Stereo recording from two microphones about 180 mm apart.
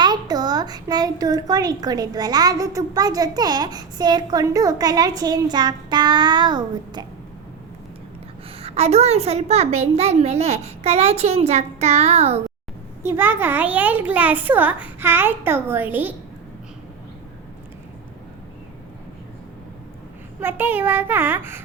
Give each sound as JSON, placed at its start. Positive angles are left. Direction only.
{"t": 0.0, "sound": "a woman's voice", "side_deg": -20}
{"t": 8.6, "sound": "a child's voice", "side_deg": -35}
{"t": 13.0, "sound": "a child's voice", "side_deg": -15}
{"t": 20.4, "sound": "a child's voice", "side_deg": -10}